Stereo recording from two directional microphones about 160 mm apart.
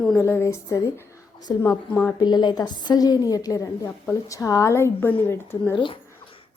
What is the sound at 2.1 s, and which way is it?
A woman's voice, 25° left (ahead or behind).